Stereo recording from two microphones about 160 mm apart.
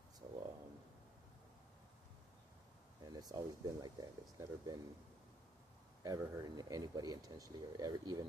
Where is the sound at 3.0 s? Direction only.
25° right (ahead or behind).